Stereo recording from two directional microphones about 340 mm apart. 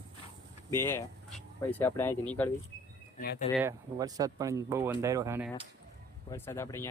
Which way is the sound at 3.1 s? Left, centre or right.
Left.